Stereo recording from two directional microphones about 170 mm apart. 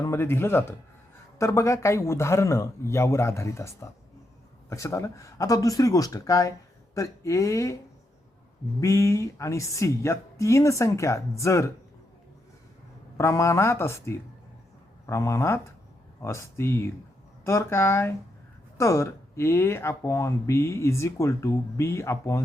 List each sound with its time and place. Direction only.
0.0 s a man's voice: 15° left (ahead or behind)
8.8 s speech: 15° left (ahead or behind)
13.1 s speech: 15° left (ahead or behind)